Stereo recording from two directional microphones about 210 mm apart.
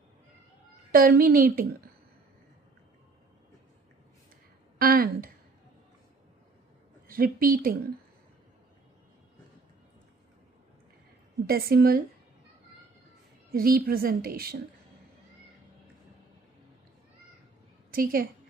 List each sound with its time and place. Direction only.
0.9 s a woman's voice: 45° right (ahead or behind)
4.8 s a sound: 45° right (ahead or behind)
7.1 s a woman's voice: 45° right (ahead or behind)
11.4 s a woman's voice: 45° right (ahead or behind)
13.5 s a woman's voice: 45° right (ahead or behind)
17.9 s a woman's voice: 45° right (ahead or behind)